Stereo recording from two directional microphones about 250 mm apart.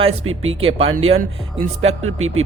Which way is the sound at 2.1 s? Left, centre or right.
Right.